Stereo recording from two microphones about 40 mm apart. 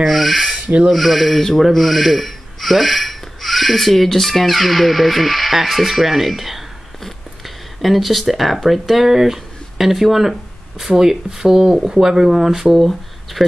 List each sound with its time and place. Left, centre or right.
0.0 s speech: centre